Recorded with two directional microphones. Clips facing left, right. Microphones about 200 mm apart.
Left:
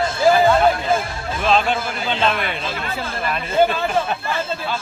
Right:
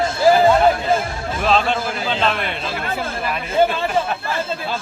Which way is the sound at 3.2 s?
10° right (ahead or behind).